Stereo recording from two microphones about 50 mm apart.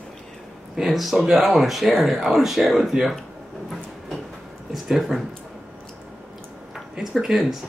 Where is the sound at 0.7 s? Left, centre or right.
Centre.